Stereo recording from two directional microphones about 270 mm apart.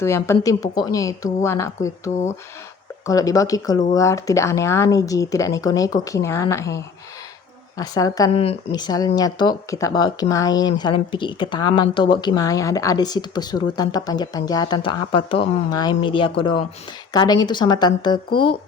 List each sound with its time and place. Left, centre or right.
0.0 s speech: centre
3.1 s speech: centre